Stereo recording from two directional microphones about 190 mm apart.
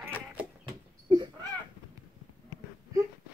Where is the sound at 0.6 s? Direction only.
25° right (ahead or behind).